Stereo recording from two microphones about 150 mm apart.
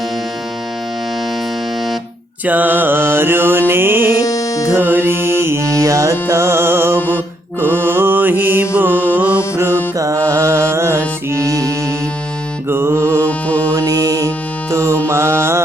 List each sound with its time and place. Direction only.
2.5 s mantra: 10° right (ahead or behind)
4.2 s music: 25° left (ahead or behind)
4.7 s music: 10° right (ahead or behind)
7.6 s mantra: 15° right (ahead or behind)
9.1 s music: 10° right (ahead or behind)
12.6 s mantra: 15° right (ahead or behind)
13.5 s music: 10° left (ahead or behind)
13.7 s music: 25° right (ahead or behind)
15.0 s mantra: 15° right (ahead or behind)